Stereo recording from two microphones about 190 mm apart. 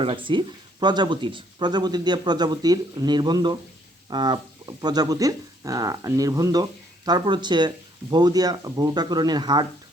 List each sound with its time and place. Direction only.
0.0 s speech: 25° right (ahead or behind)